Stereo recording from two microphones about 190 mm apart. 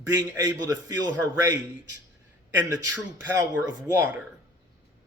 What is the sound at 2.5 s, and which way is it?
Speech, 15° right (ahead or behind).